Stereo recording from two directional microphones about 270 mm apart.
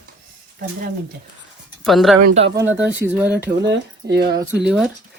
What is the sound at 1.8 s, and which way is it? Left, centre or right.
Speech, centre.